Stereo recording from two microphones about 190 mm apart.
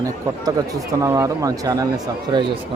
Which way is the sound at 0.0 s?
20° right (ahead or behind).